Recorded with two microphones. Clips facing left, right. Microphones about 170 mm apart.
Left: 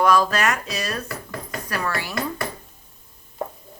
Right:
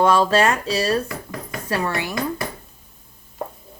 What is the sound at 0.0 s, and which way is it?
Speech, 25° right (ahead or behind).